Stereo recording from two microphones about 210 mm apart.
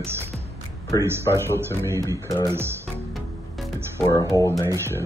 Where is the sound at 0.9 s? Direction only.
15° left (ahead or behind).